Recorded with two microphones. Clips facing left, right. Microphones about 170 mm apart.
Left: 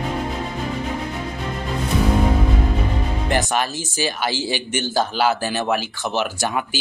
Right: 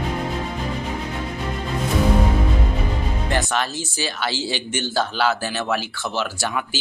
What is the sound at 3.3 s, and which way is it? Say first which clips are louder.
Music: left 2 dB; 10° left (ahead or behind).